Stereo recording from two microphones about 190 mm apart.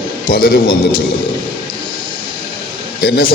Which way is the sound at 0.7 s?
25° left (ahead or behind).